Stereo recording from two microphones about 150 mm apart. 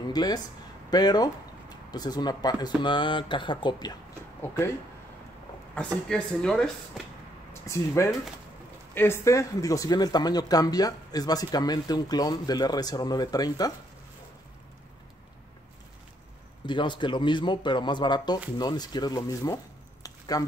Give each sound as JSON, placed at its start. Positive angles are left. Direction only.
{"t": 0.1, "sound": "speech", "side_deg": 25}
{"t": 5.8, "sound": "speech", "side_deg": 5}
{"t": 7.6, "sound": "speech", "side_deg": 20}
{"t": 16.6, "sound": "speech", "side_deg": 30}